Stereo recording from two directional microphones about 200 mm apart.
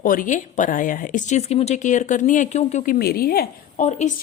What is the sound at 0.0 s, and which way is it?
Speech, 45° left (ahead or behind).